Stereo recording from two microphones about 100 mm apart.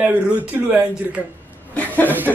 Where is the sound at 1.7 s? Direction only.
15° left (ahead or behind).